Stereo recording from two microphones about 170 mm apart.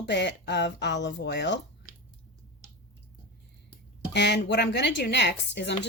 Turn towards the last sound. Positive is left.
turn(degrees=90)